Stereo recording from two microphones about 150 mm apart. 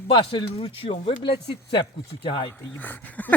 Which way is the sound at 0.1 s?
35° left (ahead or behind).